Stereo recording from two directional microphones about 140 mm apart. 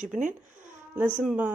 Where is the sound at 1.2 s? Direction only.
10° right (ahead or behind).